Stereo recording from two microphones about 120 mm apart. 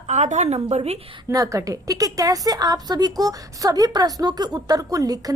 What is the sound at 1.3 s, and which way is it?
A woman's voice, 30° right (ahead or behind).